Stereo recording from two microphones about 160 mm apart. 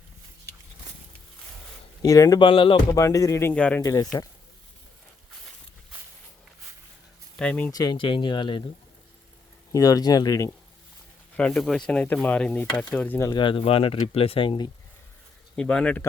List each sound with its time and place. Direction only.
2.0 s speech: 20° left (ahead or behind)
2.9 s speech: 20° left (ahead or behind)
3.5 s speech: 5° left (ahead or behind)
3.8 s speech: 20° left (ahead or behind)
7.3 s speech: 5° left (ahead or behind)
7.7 s speech: 25° left (ahead or behind)
9.7 s speech: 25° left (ahead or behind)
11.3 s speech: 5° left (ahead or behind)
13.3 s speech: 30° left (ahead or behind)
15.5 s speech: 5° left (ahead or behind)